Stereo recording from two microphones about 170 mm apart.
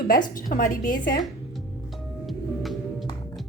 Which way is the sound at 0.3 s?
55° left (ahead or behind).